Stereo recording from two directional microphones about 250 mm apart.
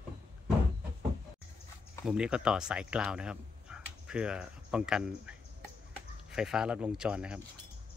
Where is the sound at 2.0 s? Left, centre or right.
Centre.